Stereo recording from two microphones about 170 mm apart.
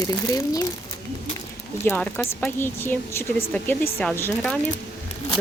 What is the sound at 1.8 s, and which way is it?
Speech, 10° left (ahead or behind).